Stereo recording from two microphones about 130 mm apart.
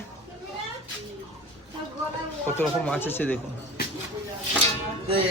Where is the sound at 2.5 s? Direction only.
10° left (ahead or behind).